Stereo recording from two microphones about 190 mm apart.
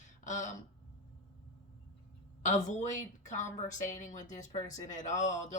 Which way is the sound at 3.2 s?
40° left (ahead or behind).